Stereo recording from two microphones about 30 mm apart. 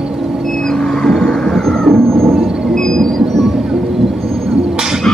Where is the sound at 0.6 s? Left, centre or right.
Centre.